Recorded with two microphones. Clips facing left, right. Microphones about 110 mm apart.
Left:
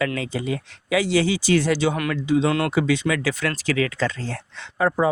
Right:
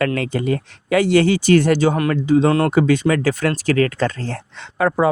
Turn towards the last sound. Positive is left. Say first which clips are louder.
# right 3 dB
turn(degrees=-65)  # may be behind; listen again after turning